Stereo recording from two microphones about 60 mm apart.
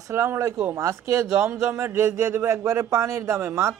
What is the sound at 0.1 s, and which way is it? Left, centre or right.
A man's voice, right.